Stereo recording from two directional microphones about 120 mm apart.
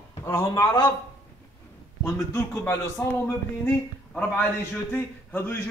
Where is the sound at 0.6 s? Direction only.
35° left (ahead or behind).